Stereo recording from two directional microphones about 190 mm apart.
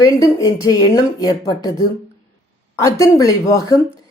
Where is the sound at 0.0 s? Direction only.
20° left (ahead or behind).